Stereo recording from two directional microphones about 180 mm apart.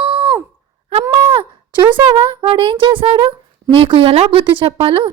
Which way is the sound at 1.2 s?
30° right (ahead or behind).